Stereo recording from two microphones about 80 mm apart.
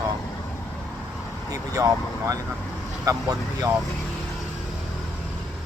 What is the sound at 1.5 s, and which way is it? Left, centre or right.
Speech, right.